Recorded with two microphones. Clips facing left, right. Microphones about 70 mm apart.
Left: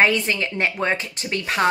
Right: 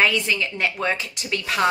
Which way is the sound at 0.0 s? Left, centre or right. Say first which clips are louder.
Left 2 dB; left.